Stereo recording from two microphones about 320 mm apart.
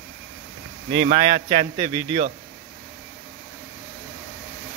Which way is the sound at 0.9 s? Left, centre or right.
Right.